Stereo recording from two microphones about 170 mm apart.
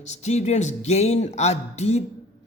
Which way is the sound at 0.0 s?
40° left (ahead or behind).